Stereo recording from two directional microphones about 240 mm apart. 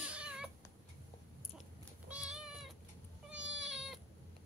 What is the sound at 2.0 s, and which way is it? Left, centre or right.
Cat, centre.